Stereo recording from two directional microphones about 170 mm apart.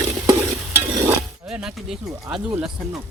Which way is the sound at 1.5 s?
5° right (ahead or behind).